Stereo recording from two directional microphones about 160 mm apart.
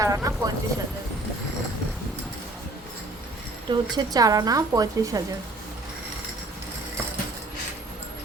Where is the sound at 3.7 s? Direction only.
25° right (ahead or behind).